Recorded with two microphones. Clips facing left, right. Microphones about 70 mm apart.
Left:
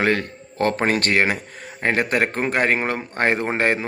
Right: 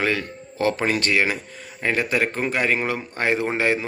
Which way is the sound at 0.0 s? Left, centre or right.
Left.